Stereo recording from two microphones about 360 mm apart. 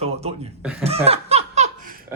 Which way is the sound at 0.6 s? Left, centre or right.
Centre.